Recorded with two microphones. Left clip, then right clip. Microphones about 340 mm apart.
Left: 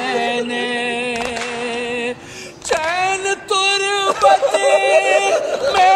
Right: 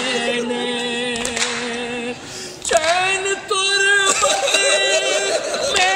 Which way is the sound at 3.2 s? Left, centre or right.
Centre.